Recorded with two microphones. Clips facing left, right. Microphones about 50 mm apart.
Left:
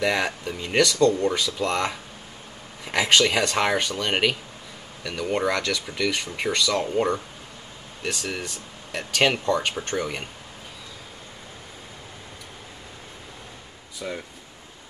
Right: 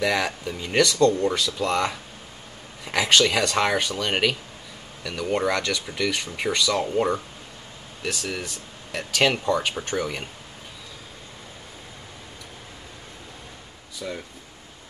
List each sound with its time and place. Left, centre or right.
0.0 s speech: centre
14.0 s speech: left